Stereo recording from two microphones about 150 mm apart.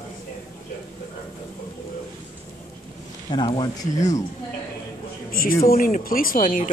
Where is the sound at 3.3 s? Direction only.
30° left (ahead or behind).